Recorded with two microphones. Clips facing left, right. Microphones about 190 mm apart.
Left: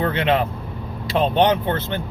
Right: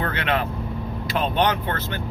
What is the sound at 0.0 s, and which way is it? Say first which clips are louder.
Speech: left 5 dB; 25° left (ahead or behind).